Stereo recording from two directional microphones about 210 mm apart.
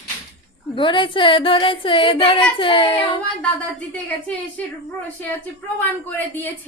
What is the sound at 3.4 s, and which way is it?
A woman's voice, 5° left (ahead or behind).